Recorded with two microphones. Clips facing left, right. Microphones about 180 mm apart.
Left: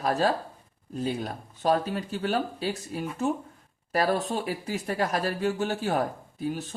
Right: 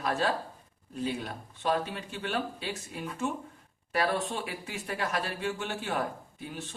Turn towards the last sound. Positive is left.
turn(degrees=40)  # may be behind; listen again after turning